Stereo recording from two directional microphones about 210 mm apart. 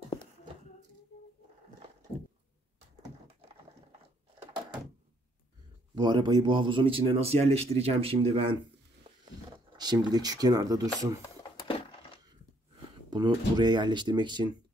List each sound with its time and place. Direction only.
5.9 s speech: 20° right (ahead or behind)
11.2 s a sound: 25° left (ahead or behind)
13.1 s speech: 20° right (ahead or behind)